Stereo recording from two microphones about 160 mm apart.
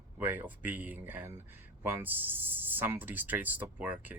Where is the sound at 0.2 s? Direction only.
10° right (ahead or behind).